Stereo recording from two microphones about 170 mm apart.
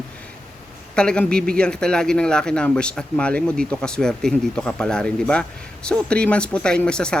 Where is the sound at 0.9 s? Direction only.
5° left (ahead or behind).